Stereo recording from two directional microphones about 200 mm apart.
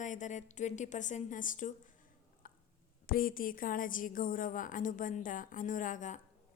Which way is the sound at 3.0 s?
45° left (ahead or behind).